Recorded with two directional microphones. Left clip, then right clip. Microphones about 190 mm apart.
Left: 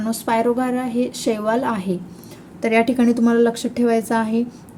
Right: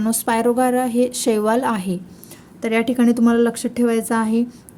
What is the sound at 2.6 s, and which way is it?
A woman's voice, 25° right (ahead or behind).